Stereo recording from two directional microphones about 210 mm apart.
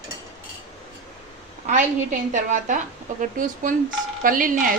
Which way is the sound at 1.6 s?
35° right (ahead or behind).